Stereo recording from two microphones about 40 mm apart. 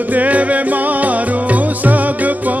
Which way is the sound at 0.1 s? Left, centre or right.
Right.